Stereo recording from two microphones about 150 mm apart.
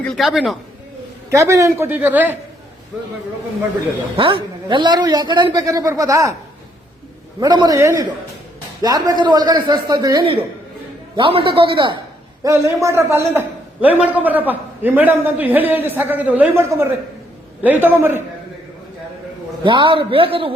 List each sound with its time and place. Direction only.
0.0 s speech: centre (ahead or behind)
1.3 s a man's voice: 20° right (ahead or behind)
4.2 s a man's voice: 35° right (ahead or behind)
7.3 s a man's voice: 25° right (ahead or behind)
12.4 s a man's voice: 20° right (ahead or behind)
19.6 s a man's voice: 35° right (ahead or behind)